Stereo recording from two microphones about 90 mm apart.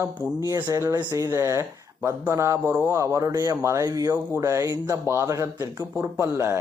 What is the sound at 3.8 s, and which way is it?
Speech, 45° right (ahead or behind).